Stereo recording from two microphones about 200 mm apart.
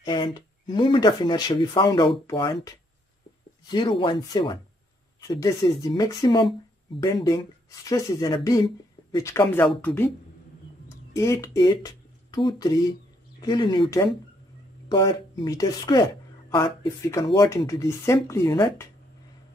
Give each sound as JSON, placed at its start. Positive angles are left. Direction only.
{"t": 0.0, "sound": "speech", "side_deg": 20}
{"t": 3.6, "sound": "speech", "side_deg": 25}
{"t": 7.9, "sound": "speech", "side_deg": 15}
{"t": 11.1, "sound": "speech", "side_deg": 15}